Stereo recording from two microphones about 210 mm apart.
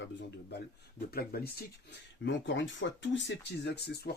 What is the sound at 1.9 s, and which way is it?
Speech, 60° left (ahead or behind).